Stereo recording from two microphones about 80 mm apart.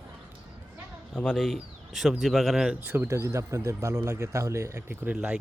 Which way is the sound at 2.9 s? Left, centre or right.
Right.